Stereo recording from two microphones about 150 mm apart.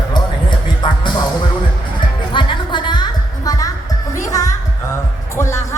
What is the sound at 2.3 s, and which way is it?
Music, 30° left (ahead or behind).